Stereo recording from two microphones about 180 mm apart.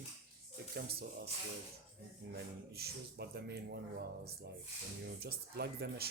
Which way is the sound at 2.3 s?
60° right (ahead or behind).